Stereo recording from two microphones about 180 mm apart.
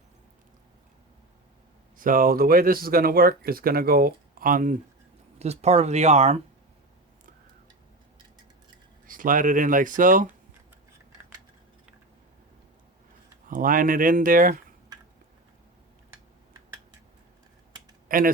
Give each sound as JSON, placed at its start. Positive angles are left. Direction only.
{"t": 2.0, "sound": "speech", "side_deg": -50}
{"t": 5.4, "sound": "speech", "side_deg": -35}
{"t": 9.0, "sound": "speech", "side_deg": -50}
{"t": 13.5, "sound": "speech", "side_deg": -50}
{"t": 18.1, "sound": "a man's voice", "side_deg": -50}